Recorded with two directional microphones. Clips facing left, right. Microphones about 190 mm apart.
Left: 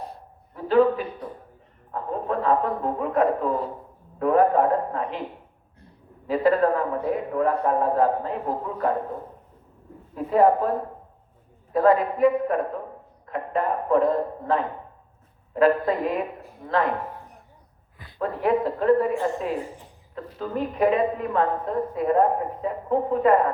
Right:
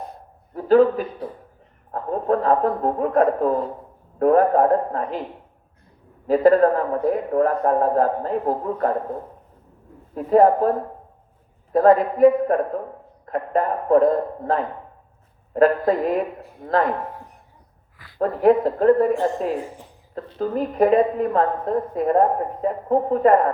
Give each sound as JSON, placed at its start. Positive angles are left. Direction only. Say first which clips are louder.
{"t": 0.5, "sound": "a sound", "louder": "right 4 dB", "side_deg": -45}
{"t": 4.2, "sound": "speech", "louder": "right 3 dB", "side_deg": -45}
{"t": 6.2, "sound": "speech", "louder": "right 5 dB", "side_deg": -45}
{"t": 10.2, "sound": "speech", "louder": "right 4 dB", "side_deg": -45}
{"t": 11.7, "sound": "speech", "louder": "right 4 dB", "side_deg": -45}
{"t": 18.2, "sound": "a woman's voice", "louder": "right 6 dB", "side_deg": -45}